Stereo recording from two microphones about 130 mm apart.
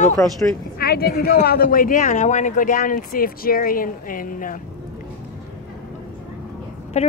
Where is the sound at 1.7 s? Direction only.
90° left.